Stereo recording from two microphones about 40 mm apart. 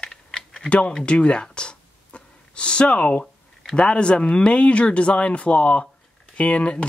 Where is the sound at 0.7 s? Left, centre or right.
Left.